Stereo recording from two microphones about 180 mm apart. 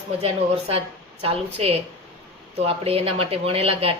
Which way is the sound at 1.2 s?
30° right (ahead or behind).